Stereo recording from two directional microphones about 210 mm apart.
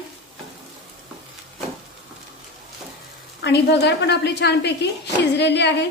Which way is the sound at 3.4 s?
55° left (ahead or behind).